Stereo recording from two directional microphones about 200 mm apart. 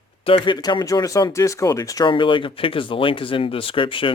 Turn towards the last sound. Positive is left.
turn(degrees=25)  # may be behind; listen again after turning